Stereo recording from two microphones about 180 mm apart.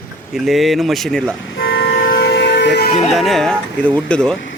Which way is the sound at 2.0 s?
55° left (ahead or behind).